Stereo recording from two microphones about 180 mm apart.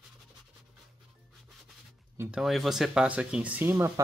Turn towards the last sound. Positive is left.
turn(degrees=-15)  # may be behind; listen again after turning